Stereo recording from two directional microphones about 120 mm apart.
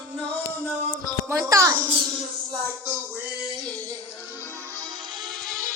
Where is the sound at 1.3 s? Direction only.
25° right (ahead or behind).